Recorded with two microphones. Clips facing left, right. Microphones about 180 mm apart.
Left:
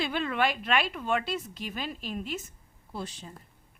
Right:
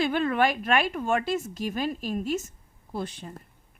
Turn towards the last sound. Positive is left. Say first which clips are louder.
# right 5 dB
turn(degrees=-55)  # may be behind; listen again after turning